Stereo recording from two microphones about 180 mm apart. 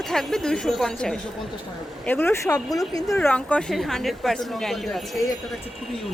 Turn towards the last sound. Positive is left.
turn(degrees=0)  # may be behind; listen again after turning